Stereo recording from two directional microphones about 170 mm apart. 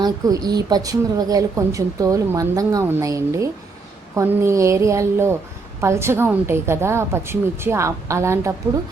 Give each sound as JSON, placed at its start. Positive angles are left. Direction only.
{"t": 0.0, "sound": "a woman's voice", "side_deg": -20}